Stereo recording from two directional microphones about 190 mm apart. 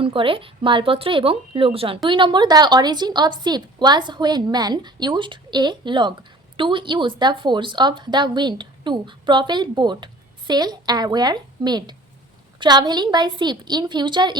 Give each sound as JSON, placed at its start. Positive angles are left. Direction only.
{"t": 0.0, "sound": "a woman's voice", "side_deg": -25}